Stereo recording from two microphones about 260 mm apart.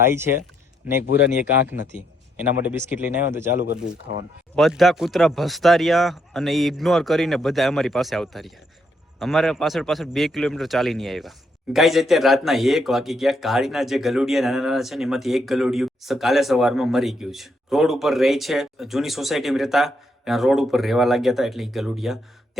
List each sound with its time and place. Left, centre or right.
0.0 s speech: centre
2.6 s speech: centre
3.6 s speech: left
4.5 s a man's voice: centre